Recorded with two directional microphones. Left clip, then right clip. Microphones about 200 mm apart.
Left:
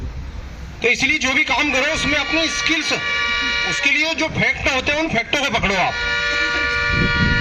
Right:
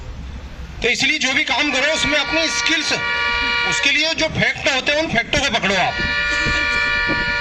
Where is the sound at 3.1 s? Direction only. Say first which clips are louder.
Right 1 dB; 50° left (ahead or behind).